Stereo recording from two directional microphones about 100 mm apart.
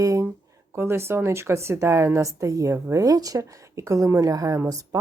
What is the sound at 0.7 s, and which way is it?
A woman's voice, 25° right (ahead or behind).